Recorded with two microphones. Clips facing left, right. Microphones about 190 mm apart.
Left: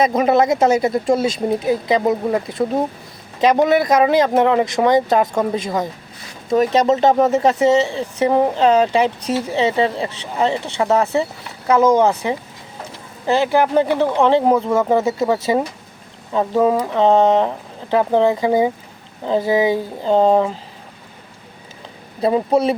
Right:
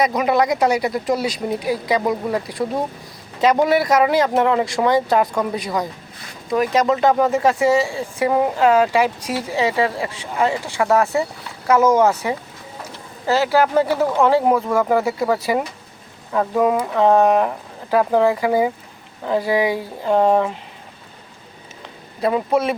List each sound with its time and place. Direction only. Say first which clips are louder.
0.0 s speech: left 3 dB; 25° left (ahead or behind)
13.9 s speech: left 2 dB; 5° right (ahead or behind)
14.2 s speech: left 1 dB; 25° left (ahead or behind)
22.2 s speech: left 3 dB; 30° left (ahead or behind)